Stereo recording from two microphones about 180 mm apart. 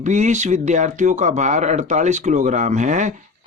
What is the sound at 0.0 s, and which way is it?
Speech, 40° right (ahead or behind).